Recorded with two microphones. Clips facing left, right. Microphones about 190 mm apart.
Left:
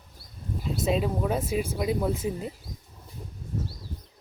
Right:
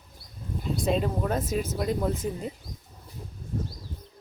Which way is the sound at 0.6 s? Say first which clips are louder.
Even; 5° left (ahead or behind).